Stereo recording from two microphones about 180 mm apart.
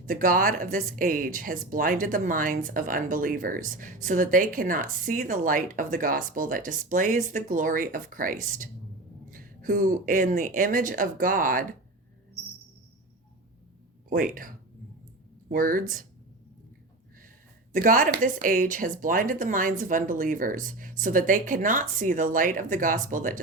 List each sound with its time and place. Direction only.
0.0 s speech: 50° right (ahead or behind)
14.1 s speech: 50° right (ahead or behind)
17.7 s speech: 50° right (ahead or behind)